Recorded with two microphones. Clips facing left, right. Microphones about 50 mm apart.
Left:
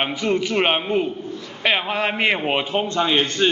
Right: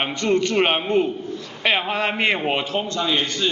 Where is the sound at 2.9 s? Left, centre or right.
Left.